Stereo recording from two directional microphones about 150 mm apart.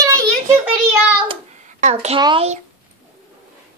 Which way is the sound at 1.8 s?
45° right (ahead or behind).